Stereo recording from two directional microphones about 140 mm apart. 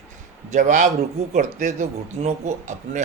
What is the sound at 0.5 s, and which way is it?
Speech, 65° right (ahead or behind).